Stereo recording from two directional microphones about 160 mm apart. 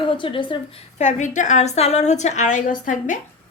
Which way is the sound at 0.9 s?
50° left (ahead or behind).